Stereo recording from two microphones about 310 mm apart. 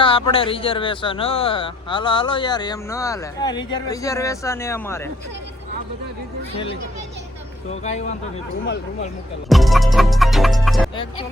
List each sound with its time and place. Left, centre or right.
0.0 s speech: centre
7.7 s a man's voice: left
9.5 s music: centre